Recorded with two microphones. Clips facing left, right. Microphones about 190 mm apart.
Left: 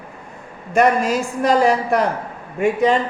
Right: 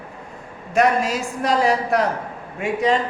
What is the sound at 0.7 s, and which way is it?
A woman's voice, centre (ahead or behind).